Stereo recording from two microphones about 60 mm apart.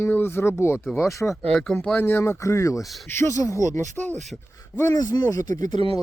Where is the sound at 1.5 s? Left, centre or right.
Centre.